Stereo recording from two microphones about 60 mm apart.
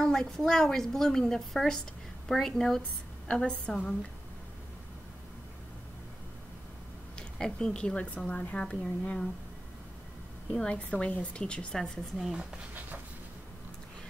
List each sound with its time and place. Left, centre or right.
0.0 s a sound: centre
0.5 s a woman's voice: centre
7.2 s a woman's voice: centre
10.5 s a woman's voice: centre
12.2 s speech: centre